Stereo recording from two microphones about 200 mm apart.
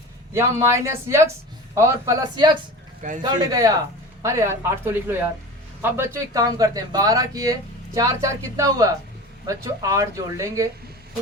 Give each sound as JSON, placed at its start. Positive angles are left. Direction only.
{"t": 0.3, "sound": "speech", "side_deg": -15}